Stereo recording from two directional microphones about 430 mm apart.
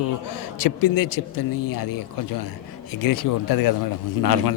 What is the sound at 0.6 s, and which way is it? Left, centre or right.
Speech, left.